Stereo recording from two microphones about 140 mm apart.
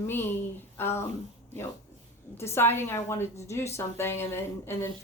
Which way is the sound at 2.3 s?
20° left (ahead or behind).